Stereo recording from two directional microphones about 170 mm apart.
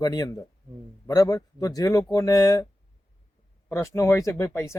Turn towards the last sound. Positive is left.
turn(degrees=15)  # may be behind; listen again after turning